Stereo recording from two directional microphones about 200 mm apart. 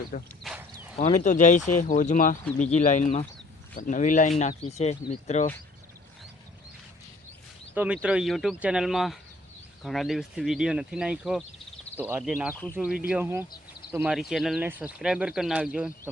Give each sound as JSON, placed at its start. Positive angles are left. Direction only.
{"t": 0.4, "sound": "a sound", "side_deg": -5}
{"t": 0.9, "sound": "speech", "side_deg": 35}
{"t": 7.7, "sound": "speech", "side_deg": -10}